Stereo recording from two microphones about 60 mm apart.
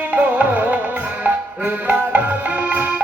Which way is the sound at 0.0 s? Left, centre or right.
Right.